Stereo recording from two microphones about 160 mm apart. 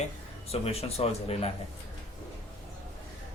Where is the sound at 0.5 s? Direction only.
40° left (ahead or behind).